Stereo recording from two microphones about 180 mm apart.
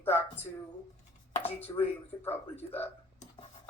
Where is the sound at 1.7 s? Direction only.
20° left (ahead or behind).